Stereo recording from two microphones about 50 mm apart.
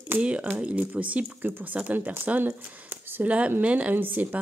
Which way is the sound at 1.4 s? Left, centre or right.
Right.